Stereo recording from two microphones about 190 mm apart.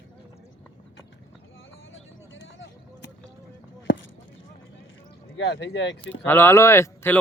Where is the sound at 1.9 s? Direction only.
75° left (ahead or behind).